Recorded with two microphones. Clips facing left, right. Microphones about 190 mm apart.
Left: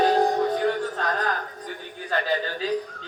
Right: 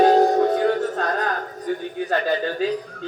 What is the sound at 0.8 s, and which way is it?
Music, 45° right (ahead or behind).